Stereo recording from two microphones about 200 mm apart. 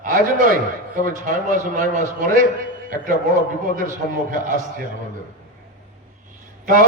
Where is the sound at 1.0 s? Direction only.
40° right (ahead or behind).